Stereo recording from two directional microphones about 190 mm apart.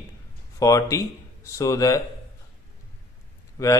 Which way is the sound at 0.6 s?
15° left (ahead or behind).